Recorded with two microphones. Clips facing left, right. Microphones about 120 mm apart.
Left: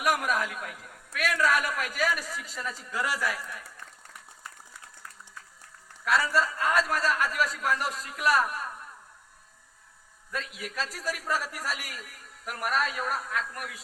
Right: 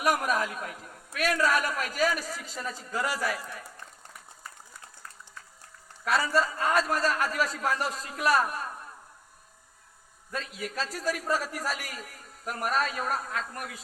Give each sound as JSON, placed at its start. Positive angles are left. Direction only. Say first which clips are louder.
{"t": 0.0, "sound": "a man's voice", "louder": "right 1 dB", "side_deg": -30}
{"t": 6.1, "sound": "a man's voice", "louder": "even", "side_deg": -25}
{"t": 10.3, "sound": "a man's voice", "louder": "right 1 dB", "side_deg": -35}